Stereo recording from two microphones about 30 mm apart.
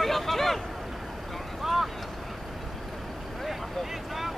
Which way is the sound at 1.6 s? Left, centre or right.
Centre.